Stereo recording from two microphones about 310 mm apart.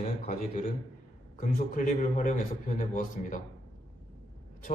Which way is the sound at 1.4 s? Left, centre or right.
Left.